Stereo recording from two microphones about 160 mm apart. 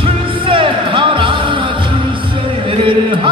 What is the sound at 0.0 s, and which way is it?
Music, 30° right (ahead or behind).